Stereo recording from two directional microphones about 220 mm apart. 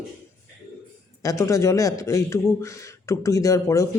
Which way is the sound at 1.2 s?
15° left (ahead or behind).